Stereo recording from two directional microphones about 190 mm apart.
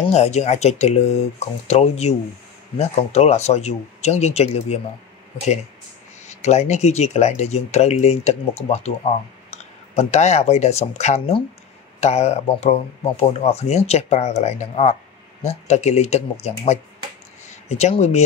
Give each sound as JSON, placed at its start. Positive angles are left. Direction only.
{"t": 0.0, "sound": "speech", "side_deg": 35}
{"t": 6.2, "sound": "speech", "side_deg": 35}
{"t": 9.9, "sound": "speech", "side_deg": 35}